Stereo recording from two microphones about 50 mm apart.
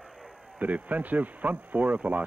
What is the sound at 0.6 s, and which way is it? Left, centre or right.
Speech, right.